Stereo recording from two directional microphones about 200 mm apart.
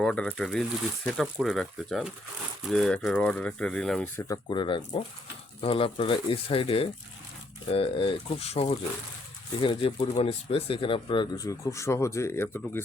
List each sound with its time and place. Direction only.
0.0 s speech: 5° left (ahead or behind)
4.3 s speech: 25° left (ahead or behind)